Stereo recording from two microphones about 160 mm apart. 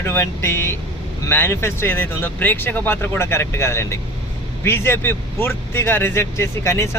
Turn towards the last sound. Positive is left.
turn(degrees=15)  # may be behind; listen again after turning